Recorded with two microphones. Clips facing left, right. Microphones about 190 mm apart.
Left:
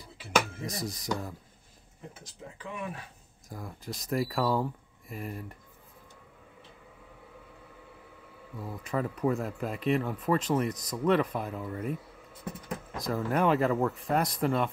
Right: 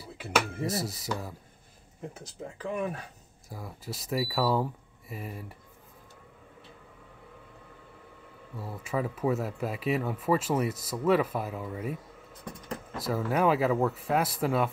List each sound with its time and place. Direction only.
0.7 s speech: 5° right (ahead or behind)
2.6 s speech: 40° right (ahead or behind)
3.4 s speech: 5° right (ahead or behind)
8.5 s speech: 5° right (ahead or behind)